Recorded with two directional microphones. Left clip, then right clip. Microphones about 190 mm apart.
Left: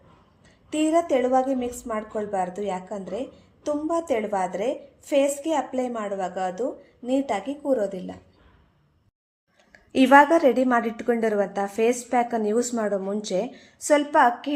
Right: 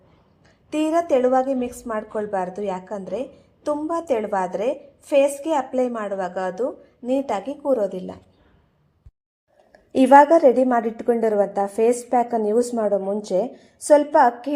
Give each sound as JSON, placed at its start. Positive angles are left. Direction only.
{"t": 0.7, "sound": "a woman's voice", "side_deg": -20}
{"t": 10.0, "sound": "a woman's voice", "side_deg": 10}
{"t": 10.5, "sound": "speech", "side_deg": -5}
{"t": 12.7, "sound": "speech", "side_deg": 0}
{"t": 13.4, "sound": "speech", "side_deg": -10}